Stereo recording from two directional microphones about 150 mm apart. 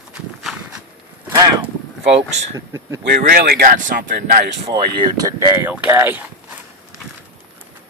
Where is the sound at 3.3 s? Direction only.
85° right.